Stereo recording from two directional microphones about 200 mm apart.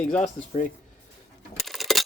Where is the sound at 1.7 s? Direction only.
Centre (ahead or behind).